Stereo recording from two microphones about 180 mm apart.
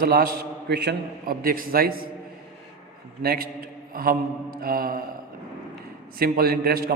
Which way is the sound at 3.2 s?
55° right (ahead or behind).